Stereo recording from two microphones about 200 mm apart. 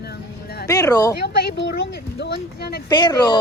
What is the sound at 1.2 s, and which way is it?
Speech, 55° left (ahead or behind).